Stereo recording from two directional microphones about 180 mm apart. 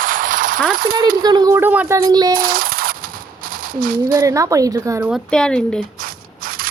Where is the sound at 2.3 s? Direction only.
50° right (ahead or behind).